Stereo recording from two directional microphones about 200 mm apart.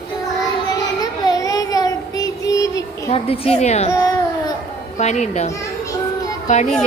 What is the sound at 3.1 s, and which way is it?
Speech, 30° left (ahead or behind).